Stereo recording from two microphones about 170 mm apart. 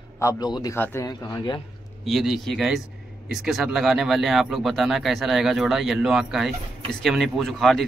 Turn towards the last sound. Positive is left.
turn(degrees=0)  # may be behind; listen again after turning